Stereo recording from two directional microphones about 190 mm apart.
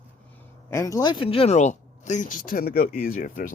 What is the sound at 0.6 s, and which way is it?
Speech, 15° left (ahead or behind).